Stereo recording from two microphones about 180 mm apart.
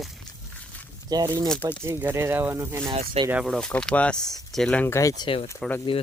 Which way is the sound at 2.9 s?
30° right (ahead or behind).